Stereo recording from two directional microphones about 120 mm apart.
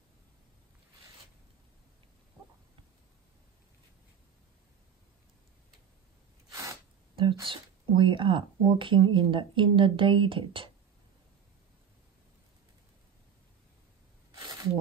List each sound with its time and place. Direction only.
6.5 s sneeze: 30° right (ahead or behind)
7.4 s speech: 45° right (ahead or behind)
14.3 s a sound: 30° right (ahead or behind)